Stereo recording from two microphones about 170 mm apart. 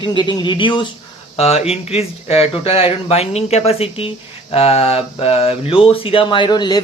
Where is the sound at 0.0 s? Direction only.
25° left (ahead or behind).